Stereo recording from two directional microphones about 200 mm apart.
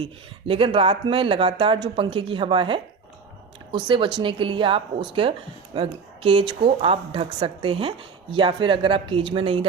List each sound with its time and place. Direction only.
0.0 s speech: 25° right (ahead or behind)